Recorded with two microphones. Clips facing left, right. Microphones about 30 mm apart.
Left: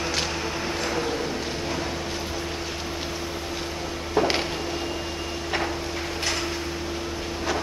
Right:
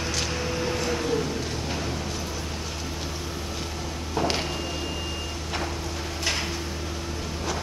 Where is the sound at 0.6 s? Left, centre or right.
Centre.